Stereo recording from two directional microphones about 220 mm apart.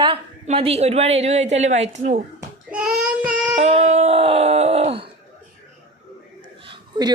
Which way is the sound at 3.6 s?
30° right (ahead or behind).